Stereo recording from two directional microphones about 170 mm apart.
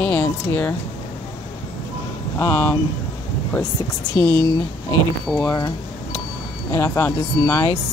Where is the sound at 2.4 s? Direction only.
15° left (ahead or behind).